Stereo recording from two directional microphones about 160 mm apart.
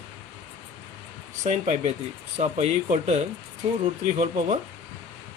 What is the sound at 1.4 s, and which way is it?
Speech, 50° right (ahead or behind).